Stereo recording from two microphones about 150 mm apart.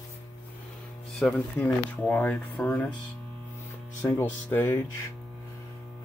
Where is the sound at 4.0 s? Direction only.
15° left (ahead or behind).